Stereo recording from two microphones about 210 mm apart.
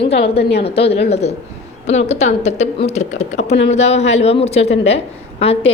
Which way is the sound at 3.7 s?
30° left (ahead or behind).